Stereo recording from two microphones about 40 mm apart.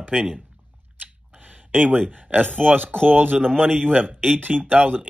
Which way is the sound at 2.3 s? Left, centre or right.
Right.